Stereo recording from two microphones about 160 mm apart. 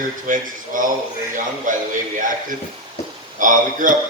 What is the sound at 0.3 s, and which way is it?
A man's voice, 55° right (ahead or behind).